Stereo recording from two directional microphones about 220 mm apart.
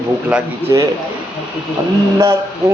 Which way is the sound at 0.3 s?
10° right (ahead or behind).